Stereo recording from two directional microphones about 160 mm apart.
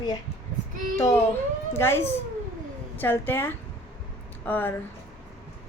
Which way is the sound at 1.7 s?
15° left (ahead or behind).